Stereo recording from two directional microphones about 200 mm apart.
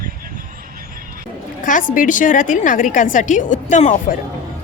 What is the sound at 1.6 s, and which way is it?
A woman's voice, 40° left (ahead or behind).